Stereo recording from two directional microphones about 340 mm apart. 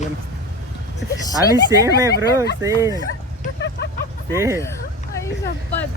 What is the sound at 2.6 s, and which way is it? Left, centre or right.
Speech, centre.